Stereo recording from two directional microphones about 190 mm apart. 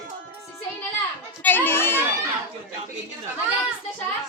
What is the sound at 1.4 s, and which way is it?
Speech, 10° left (ahead or behind).